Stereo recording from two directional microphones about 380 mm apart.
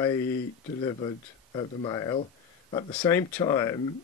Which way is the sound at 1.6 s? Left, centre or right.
Centre.